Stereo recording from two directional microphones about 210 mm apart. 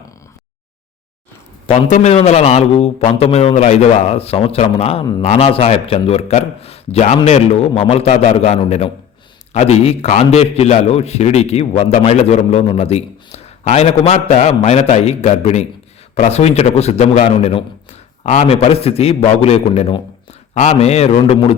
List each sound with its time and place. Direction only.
1.9 s a man's voice: 30° left (ahead or behind)